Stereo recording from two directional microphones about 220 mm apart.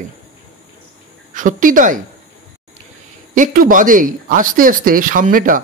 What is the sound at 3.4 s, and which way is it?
Speech, 35° right (ahead or behind).